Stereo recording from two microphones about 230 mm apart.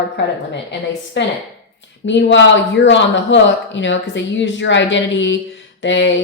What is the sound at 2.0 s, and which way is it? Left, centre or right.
Speech, left.